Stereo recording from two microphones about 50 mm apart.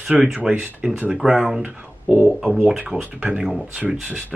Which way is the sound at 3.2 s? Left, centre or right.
Centre.